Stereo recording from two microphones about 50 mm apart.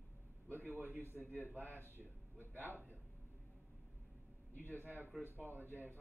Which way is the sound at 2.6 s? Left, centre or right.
Left.